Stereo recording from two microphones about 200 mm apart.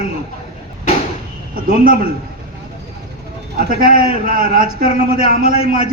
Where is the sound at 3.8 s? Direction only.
45° right (ahead or behind).